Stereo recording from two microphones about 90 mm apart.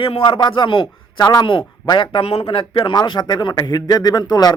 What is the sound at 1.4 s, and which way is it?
Speech, 65° left (ahead or behind).